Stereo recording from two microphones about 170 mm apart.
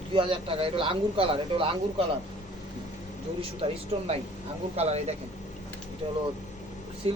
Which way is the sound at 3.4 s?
35° right (ahead or behind).